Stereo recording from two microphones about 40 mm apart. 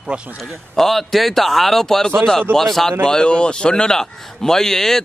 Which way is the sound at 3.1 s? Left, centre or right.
Left.